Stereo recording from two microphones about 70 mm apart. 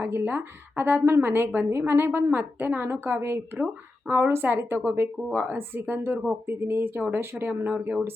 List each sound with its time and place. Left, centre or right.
0.0 s a woman's voice: right